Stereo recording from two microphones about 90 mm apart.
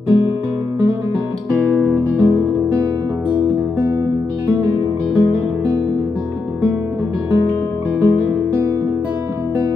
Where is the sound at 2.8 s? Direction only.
35° right (ahead or behind).